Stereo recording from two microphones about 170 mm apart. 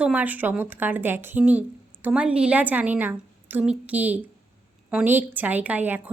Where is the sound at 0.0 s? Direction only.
10° right (ahead or behind).